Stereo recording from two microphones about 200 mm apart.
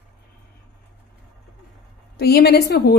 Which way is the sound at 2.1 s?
50° left (ahead or behind).